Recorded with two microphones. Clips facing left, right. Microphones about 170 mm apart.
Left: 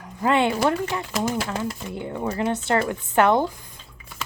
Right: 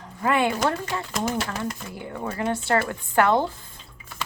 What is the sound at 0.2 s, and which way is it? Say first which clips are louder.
Speech: left 2 dB; 25° left (ahead or behind).